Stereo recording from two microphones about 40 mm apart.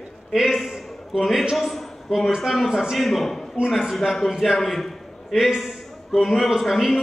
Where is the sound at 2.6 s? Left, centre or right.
Centre.